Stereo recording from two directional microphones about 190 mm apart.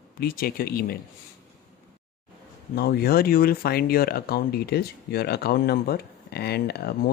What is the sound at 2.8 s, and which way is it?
Speech, 55° left (ahead or behind).